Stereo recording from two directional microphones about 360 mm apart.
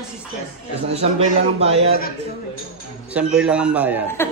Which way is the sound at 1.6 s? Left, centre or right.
Centre.